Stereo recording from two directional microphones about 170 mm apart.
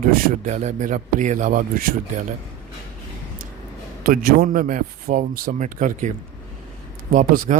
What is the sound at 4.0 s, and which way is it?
A man's voice, 55° right (ahead or behind).